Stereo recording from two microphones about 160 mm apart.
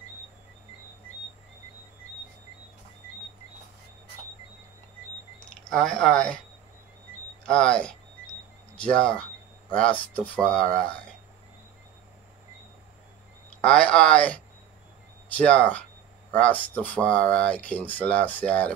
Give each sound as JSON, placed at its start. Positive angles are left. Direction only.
{"t": 5.7, "sound": "speech", "side_deg": 5}
{"t": 7.4, "sound": "speech", "side_deg": 5}
{"t": 13.6, "sound": "speech", "side_deg": 10}